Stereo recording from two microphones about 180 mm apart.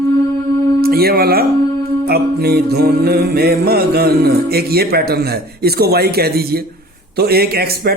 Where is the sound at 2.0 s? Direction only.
60° right (ahead or behind).